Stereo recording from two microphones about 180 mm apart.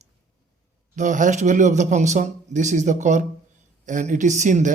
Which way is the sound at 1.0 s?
45° right (ahead or behind).